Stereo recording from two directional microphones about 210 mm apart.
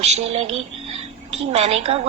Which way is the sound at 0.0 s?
30° right (ahead or behind).